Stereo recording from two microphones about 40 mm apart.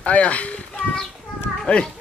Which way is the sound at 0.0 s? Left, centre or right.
Left.